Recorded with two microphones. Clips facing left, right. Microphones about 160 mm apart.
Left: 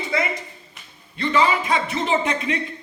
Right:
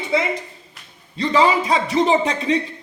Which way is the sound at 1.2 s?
35° right (ahead or behind).